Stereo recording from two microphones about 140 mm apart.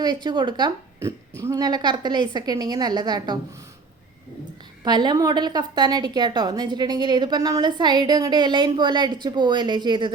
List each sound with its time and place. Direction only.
0.0 s a woman's voice: 30° right (ahead or behind)
4.8 s a woman's voice: 30° right (ahead or behind)